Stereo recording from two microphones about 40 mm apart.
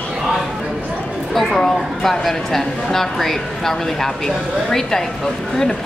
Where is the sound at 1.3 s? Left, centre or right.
Centre.